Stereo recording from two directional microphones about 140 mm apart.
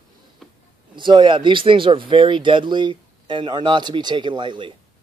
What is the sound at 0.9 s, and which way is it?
Speech, 35° right (ahead or behind).